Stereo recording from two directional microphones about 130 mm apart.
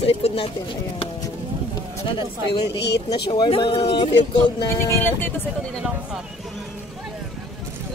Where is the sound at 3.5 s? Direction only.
45° left (ahead or behind).